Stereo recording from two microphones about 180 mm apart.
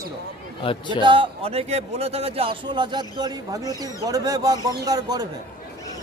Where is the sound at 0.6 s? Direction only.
30° left (ahead or behind).